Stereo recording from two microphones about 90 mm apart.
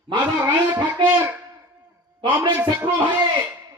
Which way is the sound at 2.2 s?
60° right (ahead or behind).